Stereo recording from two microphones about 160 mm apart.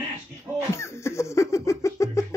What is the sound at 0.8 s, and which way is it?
Laughter, 15° left (ahead or behind).